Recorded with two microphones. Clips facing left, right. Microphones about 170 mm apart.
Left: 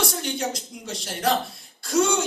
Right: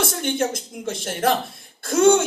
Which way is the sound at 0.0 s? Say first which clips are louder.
Right 4 dB; 55° right (ahead or behind).